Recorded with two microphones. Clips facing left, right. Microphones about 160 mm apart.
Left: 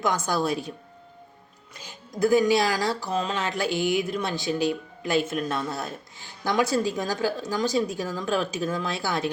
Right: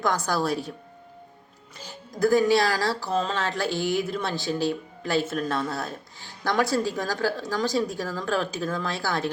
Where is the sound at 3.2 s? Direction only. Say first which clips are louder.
Even; 15° left (ahead or behind).